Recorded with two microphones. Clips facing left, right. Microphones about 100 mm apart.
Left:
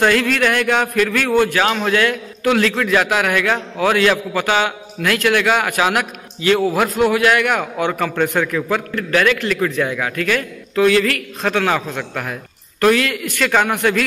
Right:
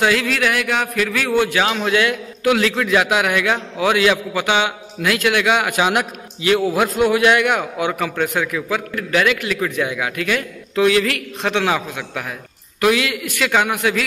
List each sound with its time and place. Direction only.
0.0 s a man's voice: 5° right (ahead or behind)
8.2 s a man's voice: 5° right (ahead or behind)